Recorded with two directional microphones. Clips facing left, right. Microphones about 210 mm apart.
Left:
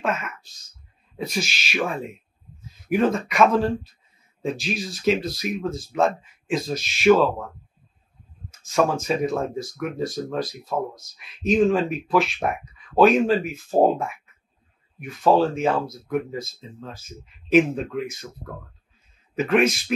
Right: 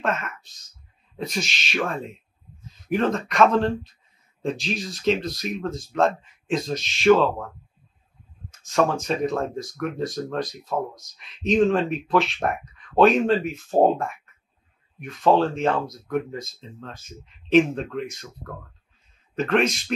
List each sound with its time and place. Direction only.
0.0 s speech: 5° left (ahead or behind)
8.5 s speech: 5° left (ahead or behind)
19.3 s speech: 5° left (ahead or behind)